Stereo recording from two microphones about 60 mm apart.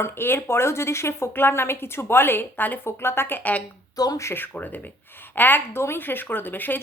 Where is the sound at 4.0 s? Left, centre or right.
Left.